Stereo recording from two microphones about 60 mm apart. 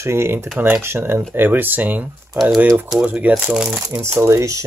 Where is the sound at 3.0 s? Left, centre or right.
Right.